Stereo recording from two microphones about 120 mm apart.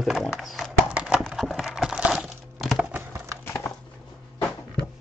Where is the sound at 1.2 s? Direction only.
Centre (ahead or behind).